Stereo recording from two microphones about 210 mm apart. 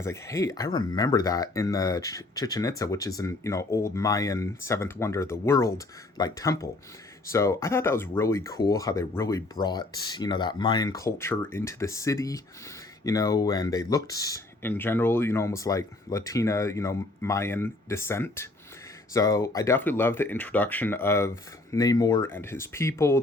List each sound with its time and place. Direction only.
0.0 s speech: 15° left (ahead or behind)